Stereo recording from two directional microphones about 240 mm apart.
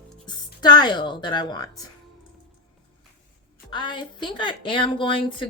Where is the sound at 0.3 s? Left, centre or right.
Centre.